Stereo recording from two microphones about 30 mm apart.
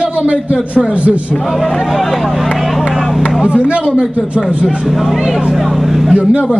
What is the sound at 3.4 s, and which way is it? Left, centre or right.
Speech, right.